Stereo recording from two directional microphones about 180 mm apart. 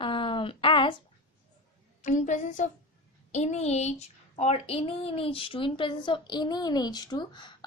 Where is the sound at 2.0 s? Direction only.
45° left (ahead or behind).